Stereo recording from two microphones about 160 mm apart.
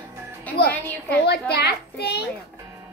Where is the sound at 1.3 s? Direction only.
90° left.